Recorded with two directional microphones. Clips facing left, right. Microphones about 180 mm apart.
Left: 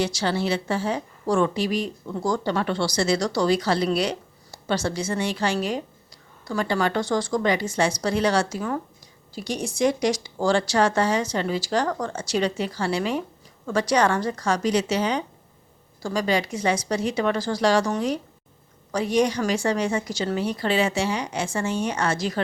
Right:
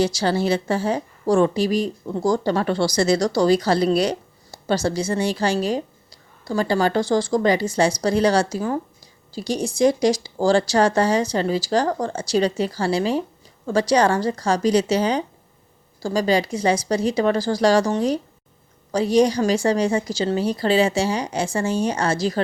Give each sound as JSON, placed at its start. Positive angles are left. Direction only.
{"t": 0.0, "sound": "a woman's voice", "side_deg": -35}